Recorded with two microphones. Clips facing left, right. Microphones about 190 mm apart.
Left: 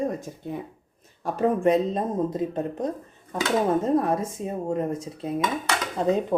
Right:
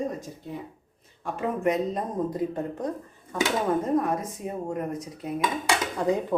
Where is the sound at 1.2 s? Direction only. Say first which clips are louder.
Left 5 dB; 30° left (ahead or behind).